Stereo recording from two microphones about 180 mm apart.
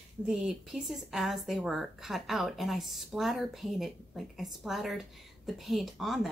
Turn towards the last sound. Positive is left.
turn(degrees=0)  # may be behind; listen again after turning